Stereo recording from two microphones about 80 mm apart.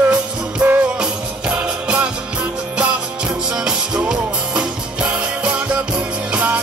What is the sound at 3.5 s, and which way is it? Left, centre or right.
Music, centre.